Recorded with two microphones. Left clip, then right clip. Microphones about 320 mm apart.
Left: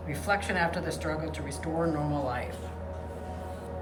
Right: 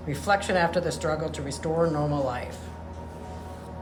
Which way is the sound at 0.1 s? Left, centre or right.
Centre.